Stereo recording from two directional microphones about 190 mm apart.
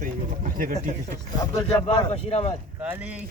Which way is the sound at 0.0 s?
45° right (ahead or behind).